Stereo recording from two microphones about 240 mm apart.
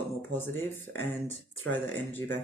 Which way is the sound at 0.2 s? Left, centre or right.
Centre.